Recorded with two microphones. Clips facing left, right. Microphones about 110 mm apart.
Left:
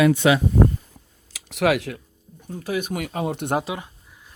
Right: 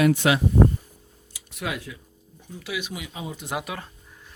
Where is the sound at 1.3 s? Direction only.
90° left.